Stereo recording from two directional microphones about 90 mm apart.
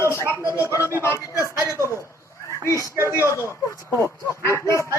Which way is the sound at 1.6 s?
35° left (ahead or behind).